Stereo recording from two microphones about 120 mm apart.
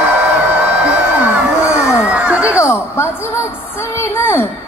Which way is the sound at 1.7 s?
25° left (ahead or behind).